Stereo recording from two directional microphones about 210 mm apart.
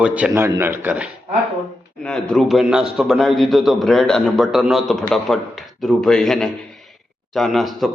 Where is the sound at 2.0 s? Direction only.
5° left (ahead or behind).